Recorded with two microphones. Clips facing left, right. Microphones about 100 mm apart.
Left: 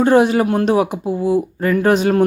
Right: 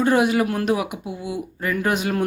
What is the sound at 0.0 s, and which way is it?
Speech, 35° left (ahead or behind).